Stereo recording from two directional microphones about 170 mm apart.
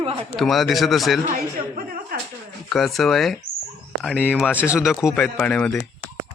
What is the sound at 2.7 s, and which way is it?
A man's voice, centre (ahead or behind).